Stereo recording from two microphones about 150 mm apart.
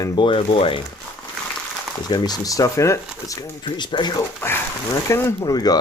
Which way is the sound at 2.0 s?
25° left (ahead or behind).